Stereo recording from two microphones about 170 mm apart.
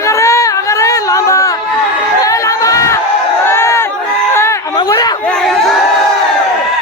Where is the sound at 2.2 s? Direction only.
20° left (ahead or behind).